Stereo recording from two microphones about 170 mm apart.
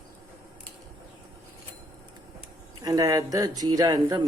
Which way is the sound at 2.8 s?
20° right (ahead or behind).